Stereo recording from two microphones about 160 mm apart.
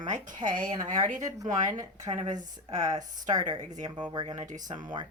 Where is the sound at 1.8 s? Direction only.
25° right (ahead or behind).